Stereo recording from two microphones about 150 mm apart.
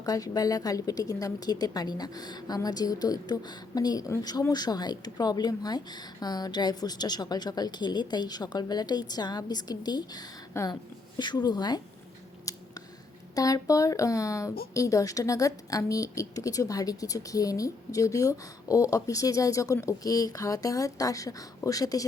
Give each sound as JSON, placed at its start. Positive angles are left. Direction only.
{"t": 0.0, "sound": "a woman's voice", "side_deg": 25}
{"t": 12.5, "sound": "a sound", "side_deg": 25}
{"t": 13.3, "sound": "a woman's voice", "side_deg": 25}